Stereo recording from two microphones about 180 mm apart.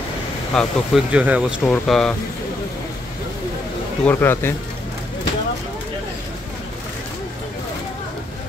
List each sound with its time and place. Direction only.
0.5 s speech: 5° left (ahead or behind)
1.1 s speech: 5° right (ahead or behind)
1.7 s speech: 5° left (ahead or behind)
4.0 s speech: 10° left (ahead or behind)